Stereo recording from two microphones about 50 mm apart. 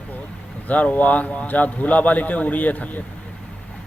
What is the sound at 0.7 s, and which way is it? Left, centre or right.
A man's voice, left.